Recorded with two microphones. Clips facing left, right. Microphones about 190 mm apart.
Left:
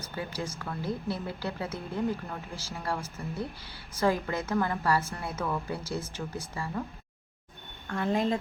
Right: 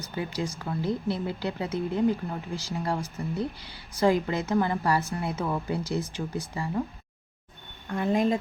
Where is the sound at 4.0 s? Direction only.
15° right (ahead or behind).